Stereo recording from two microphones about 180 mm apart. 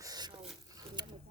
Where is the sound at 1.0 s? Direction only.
25° right (ahead or behind).